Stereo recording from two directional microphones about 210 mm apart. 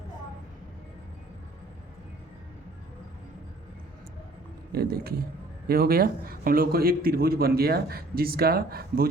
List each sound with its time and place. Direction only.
4.7 s a man's voice: 50° right (ahead or behind)